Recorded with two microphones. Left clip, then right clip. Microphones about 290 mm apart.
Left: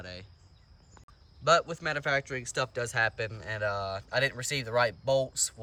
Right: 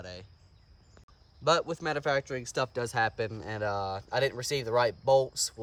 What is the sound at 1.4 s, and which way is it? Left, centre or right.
Speech, centre.